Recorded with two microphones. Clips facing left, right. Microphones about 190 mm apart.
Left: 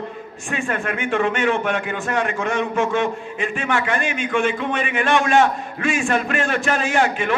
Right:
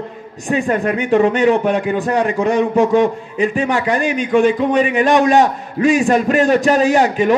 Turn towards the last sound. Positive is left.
turn(degrees=-40)  # may be behind; listen again after turning